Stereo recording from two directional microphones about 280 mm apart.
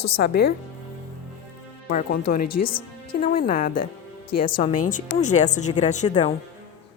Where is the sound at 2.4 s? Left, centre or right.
Left.